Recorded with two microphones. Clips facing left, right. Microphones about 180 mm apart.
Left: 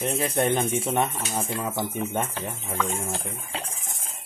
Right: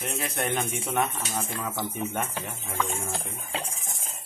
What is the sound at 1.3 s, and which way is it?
Speech, 15° left (ahead or behind).